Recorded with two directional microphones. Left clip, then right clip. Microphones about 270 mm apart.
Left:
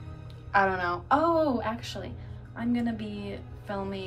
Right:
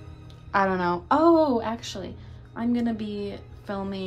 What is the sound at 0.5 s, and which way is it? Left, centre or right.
A woman's voice, right.